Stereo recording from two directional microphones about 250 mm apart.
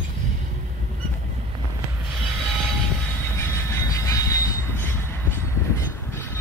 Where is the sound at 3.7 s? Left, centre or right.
Centre.